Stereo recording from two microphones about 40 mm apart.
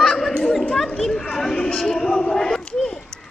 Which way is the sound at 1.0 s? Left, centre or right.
Centre.